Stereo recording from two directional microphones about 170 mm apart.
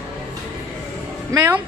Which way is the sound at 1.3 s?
15° right (ahead or behind).